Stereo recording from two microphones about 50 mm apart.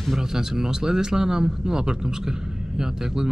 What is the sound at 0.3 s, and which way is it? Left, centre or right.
Speech, centre.